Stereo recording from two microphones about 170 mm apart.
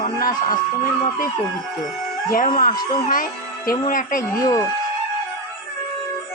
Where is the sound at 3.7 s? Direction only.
55° left (ahead or behind).